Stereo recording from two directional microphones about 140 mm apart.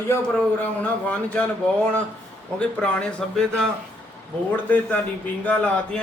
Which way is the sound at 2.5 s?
5° left (ahead or behind).